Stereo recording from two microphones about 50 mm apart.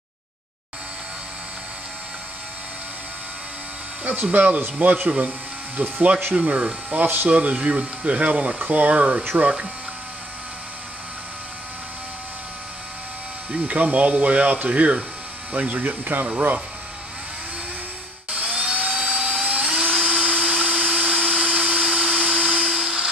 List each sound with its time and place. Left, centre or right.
4.0 s speech: right
13.5 s speech: right
18.3 s dental drill: right
18.9 s a sound: centre
21.3 s dental drill: centre